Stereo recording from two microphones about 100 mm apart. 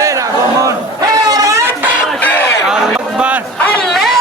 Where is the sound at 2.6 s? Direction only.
10° right (ahead or behind).